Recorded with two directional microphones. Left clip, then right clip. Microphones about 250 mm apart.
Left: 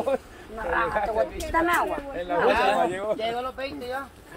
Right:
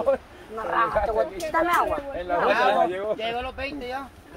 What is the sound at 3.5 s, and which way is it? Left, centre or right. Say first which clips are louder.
Speech: even; centre.